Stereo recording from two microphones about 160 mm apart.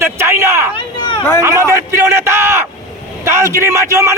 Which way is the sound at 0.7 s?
30° left (ahead or behind).